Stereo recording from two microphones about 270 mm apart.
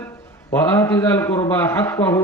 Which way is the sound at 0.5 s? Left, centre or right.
Centre.